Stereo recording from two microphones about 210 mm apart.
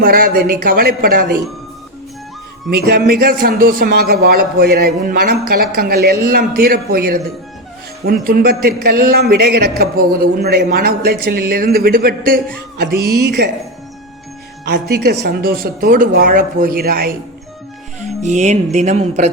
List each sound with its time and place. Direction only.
0.0 s speech: 45° right (ahead or behind)
2.8 s speech: 50° right (ahead or behind)
14.6 s speech: 50° right (ahead or behind)
18.0 s speech: 35° right (ahead or behind)